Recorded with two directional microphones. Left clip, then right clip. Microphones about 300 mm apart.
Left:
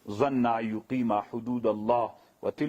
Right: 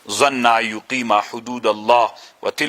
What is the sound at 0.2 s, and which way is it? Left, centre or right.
Speech, centre.